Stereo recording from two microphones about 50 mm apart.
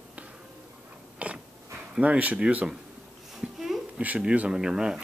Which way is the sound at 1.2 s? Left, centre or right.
Right.